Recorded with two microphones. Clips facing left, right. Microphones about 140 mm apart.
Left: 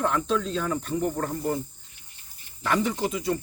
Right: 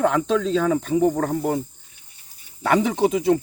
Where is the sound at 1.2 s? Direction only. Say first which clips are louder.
Right 5 dB; 80° right.